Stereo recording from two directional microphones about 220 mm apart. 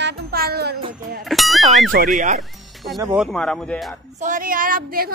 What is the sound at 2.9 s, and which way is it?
Speech, 10° right (ahead or behind).